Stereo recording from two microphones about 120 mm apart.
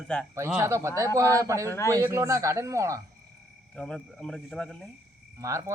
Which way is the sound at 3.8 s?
10° left (ahead or behind).